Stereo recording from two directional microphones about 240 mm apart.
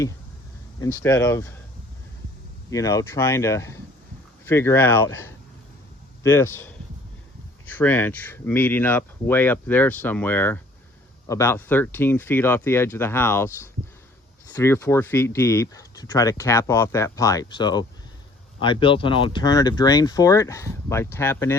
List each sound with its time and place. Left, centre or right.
0.8 s speech: centre
2.6 s speech: centre
7.7 s speech: centre
14.5 s speech: centre